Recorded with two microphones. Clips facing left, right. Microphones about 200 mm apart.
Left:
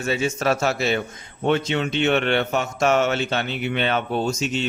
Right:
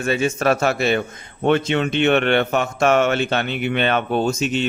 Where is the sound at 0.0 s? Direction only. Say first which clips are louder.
Right 3 dB; 55° right (ahead or behind).